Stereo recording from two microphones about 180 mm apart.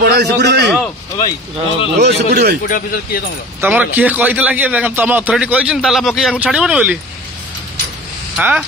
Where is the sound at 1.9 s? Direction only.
65° right (ahead or behind).